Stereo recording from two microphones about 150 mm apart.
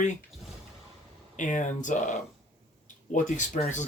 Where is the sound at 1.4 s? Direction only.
55° left (ahead or behind).